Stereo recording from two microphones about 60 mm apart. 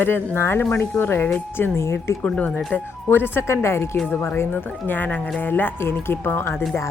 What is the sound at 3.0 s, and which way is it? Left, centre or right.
Speech, left.